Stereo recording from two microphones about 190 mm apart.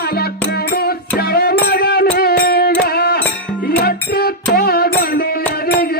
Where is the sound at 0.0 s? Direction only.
55° left (ahead or behind).